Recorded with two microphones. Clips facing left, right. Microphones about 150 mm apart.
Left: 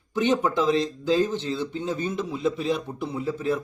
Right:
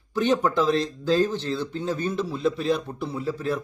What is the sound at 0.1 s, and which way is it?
Speech, 15° left (ahead or behind).